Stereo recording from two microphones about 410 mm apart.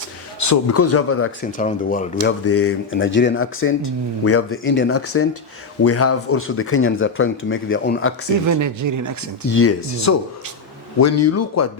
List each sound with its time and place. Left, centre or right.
0.3 s speech: left
1.5 s speech: centre
2.4 s speech: left
8.4 s speech: right
9.5 s speech: left